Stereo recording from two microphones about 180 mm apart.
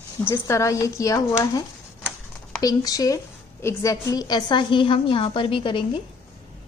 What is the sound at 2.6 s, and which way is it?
A woman's voice, 20° left (ahead or behind).